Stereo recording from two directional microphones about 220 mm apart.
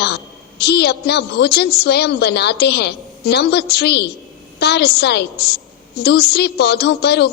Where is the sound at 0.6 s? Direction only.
50° left (ahead or behind).